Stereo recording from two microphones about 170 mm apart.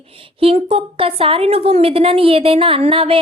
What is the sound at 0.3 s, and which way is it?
A woman's voice, 35° right (ahead or behind).